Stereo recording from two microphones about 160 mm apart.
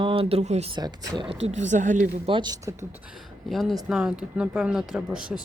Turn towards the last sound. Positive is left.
turn(degrees=-5)  # may be behind; listen again after turning